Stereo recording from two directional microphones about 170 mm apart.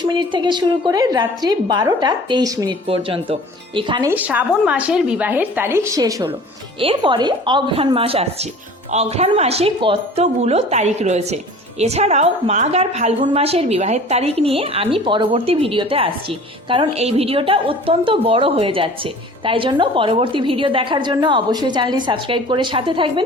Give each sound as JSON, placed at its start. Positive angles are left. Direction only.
{"t": 0.1, "sound": "a woman's voice", "side_deg": -25}
{"t": 4.1, "sound": "a woman's voice", "side_deg": -10}